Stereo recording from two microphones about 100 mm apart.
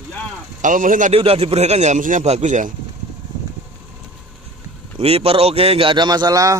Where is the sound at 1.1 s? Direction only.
75° right (ahead or behind).